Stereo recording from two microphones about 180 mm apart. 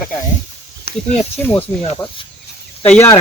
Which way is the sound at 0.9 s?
60° left (ahead or behind).